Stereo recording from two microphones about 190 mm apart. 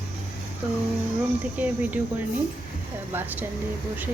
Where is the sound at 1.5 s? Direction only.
10° right (ahead or behind).